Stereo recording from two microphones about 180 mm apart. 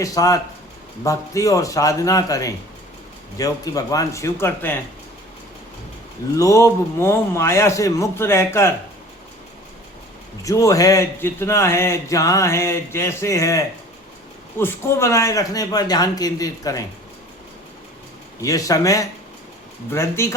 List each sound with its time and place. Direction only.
0.0 s a man's voice: 20° left (ahead or behind)
6.3 s speech: 15° left (ahead or behind)
10.4 s a man's voice: 20° left (ahead or behind)
18.3 s a man's voice: 20° left (ahead or behind)